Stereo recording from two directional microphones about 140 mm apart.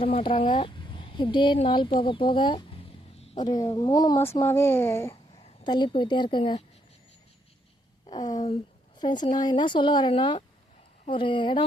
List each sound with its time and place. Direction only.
0.0 s speech: 40° left (ahead or behind)
4.2 s speech: 20° left (ahead or behind)
5.6 s speech: 30° left (ahead or behind)
8.0 s a sound: 30° left (ahead or behind)
9.0 s speech: 30° left (ahead or behind)